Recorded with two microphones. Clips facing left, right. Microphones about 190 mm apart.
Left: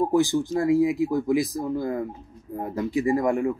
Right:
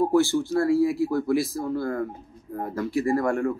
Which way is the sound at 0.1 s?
15° left (ahead or behind).